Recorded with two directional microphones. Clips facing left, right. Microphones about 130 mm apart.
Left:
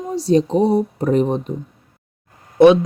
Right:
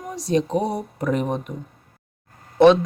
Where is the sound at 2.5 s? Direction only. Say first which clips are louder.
Left 3 dB; 10° left (ahead or behind).